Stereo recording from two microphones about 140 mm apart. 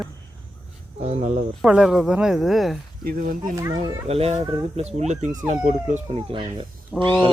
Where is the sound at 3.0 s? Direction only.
90° right.